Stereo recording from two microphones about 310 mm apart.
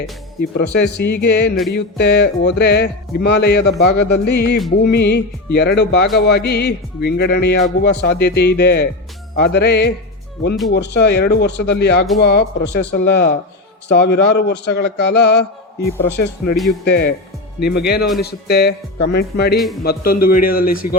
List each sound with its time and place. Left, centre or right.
0.5 s speech: left
19.5 s a man's voice: centre
19.8 s a man's voice: left